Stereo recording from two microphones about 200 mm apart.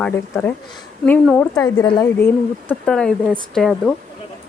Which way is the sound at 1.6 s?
20° left (ahead or behind).